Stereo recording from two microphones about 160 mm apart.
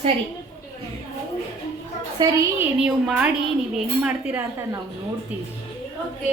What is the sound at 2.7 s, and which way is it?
A woman's voice, 5° right (ahead or behind).